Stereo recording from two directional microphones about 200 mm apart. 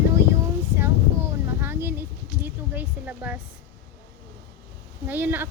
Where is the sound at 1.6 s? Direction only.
10° right (ahead or behind).